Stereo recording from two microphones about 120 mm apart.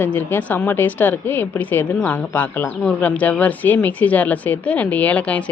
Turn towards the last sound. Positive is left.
turn(degrees=10)  # may be behind; listen again after turning